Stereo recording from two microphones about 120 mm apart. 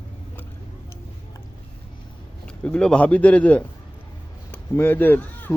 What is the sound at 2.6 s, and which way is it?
Speech, 10° left (ahead or behind).